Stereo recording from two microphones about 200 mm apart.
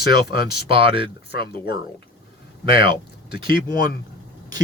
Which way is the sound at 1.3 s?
50° left (ahead or behind).